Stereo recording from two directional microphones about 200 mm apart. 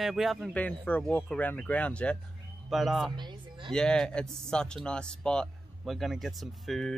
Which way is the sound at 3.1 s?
25° right (ahead or behind).